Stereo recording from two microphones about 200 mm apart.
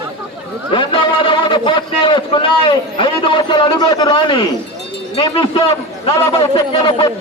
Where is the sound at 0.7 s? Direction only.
25° left (ahead or behind).